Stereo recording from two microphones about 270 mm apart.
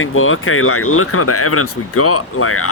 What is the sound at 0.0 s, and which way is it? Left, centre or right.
Speech, left.